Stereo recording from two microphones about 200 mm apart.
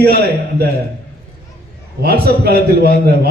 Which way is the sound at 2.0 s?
50° right (ahead or behind).